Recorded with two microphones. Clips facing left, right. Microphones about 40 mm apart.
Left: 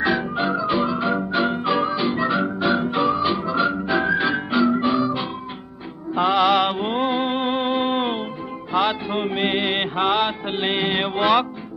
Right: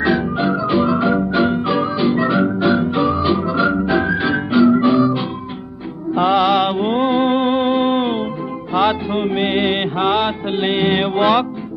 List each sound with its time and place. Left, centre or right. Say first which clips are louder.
0.0 s music: right 4 dB; centre
10.0 s mantra: right 4 dB; centre
10.9 s music: right 3 dB; centre